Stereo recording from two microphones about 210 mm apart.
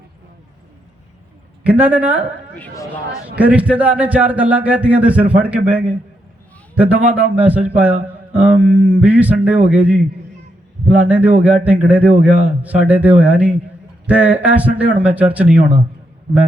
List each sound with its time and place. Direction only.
1.6 s a man's voice: 5° right (ahead or behind)
2.6 s speech: 15° left (ahead or behind)
3.3 s a man's voice: 5° right (ahead or behind)